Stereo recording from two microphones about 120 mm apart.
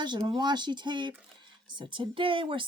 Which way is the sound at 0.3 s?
40° right (ahead or behind).